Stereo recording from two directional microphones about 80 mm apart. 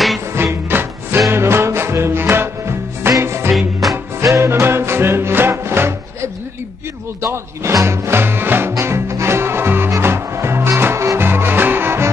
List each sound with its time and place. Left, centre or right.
0.3 s music: right